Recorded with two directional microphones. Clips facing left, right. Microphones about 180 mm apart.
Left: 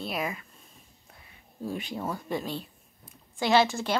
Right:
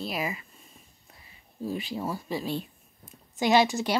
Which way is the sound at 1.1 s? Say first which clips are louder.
Left 1 dB; 5° right (ahead or behind).